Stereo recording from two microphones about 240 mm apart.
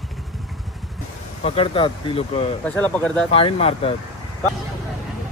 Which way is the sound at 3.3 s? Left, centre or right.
Left.